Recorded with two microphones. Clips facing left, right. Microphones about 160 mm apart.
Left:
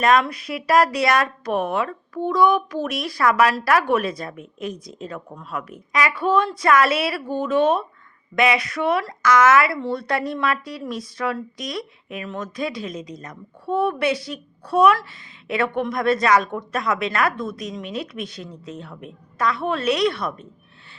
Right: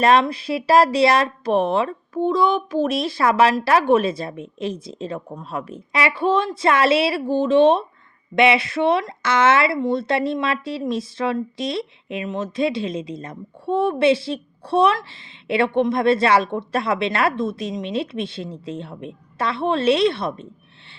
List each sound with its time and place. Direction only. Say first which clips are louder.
0.0 s speech: right 2 dB; 30° right (ahead or behind)